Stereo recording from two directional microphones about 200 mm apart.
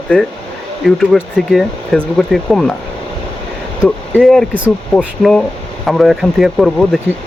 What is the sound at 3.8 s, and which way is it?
Speech, centre (ahead or behind).